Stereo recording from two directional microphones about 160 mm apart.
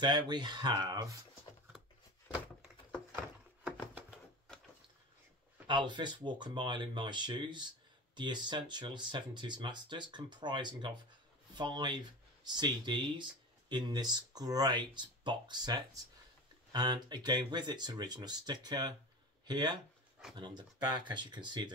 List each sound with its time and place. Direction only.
0.0 s speech: 25° right (ahead or behind)
5.7 s speech: 30° right (ahead or behind)